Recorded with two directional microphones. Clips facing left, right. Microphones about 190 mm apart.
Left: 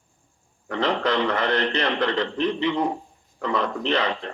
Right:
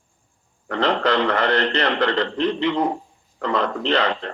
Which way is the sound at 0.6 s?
70° right (ahead or behind).